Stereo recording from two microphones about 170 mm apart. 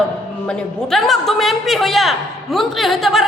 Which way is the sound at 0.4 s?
Centre (ahead or behind).